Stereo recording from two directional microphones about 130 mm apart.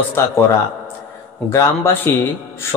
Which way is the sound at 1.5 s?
20° left (ahead or behind).